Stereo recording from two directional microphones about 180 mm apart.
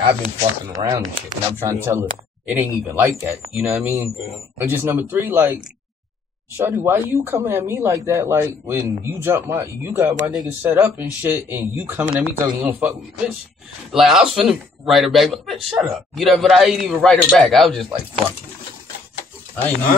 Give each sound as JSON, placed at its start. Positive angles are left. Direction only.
{"t": 0.0, "sound": "speech", "side_deg": -35}
{"t": 0.7, "sound": "speech", "side_deg": -15}
{"t": 13.9, "sound": "speech", "side_deg": 0}